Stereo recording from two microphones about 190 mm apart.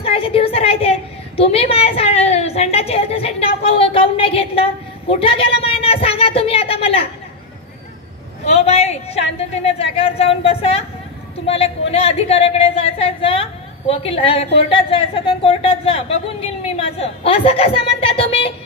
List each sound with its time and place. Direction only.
0.0 s a sound: 30° left (ahead or behind)
5.1 s a woman's voice: 30° left (ahead or behind)
8.5 s a woman's voice: 35° left (ahead or behind)